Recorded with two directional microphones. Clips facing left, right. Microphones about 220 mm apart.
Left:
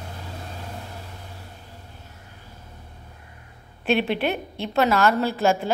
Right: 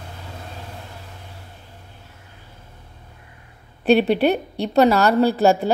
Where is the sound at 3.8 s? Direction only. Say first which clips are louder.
Right 7 dB; 40° right (ahead or behind).